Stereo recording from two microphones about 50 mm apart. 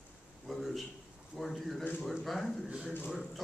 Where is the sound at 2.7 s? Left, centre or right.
Right.